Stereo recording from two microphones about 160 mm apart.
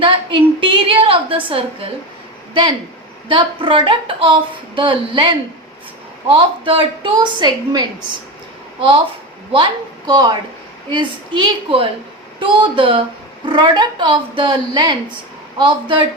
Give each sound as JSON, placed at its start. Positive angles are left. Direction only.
{"t": 0.0, "sound": "a woman's voice", "side_deg": -30}
{"t": 3.2, "sound": "speech", "side_deg": -30}
{"t": 10.1, "sound": "a woman's voice", "side_deg": -25}